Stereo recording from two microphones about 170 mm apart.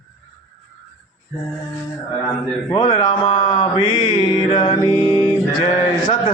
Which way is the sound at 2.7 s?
25° left (ahead or behind).